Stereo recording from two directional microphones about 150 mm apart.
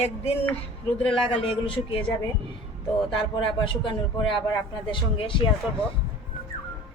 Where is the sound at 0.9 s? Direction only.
40° left (ahead or behind).